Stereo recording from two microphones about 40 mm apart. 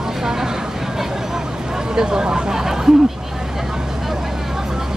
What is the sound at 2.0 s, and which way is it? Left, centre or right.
Speech, centre.